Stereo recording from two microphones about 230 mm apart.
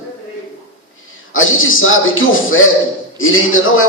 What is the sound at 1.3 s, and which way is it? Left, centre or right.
A man's voice, left.